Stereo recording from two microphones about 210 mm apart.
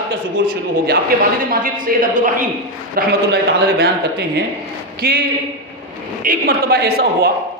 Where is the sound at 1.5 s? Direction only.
40° right (ahead or behind).